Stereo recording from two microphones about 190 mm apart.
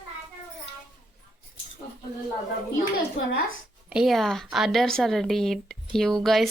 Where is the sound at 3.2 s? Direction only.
80° left.